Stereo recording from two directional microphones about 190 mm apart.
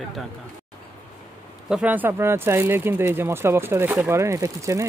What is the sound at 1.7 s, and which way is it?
Speech, 5° right (ahead or behind).